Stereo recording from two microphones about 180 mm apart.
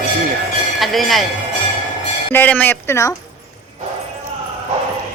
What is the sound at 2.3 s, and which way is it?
Speech, 10° left (ahead or behind).